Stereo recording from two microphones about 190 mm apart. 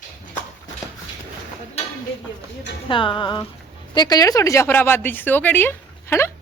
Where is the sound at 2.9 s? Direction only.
25° left (ahead or behind).